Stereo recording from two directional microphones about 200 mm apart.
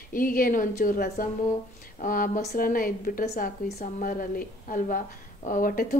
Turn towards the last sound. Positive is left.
turn(degrees=45)  # may be behind; listen again after turning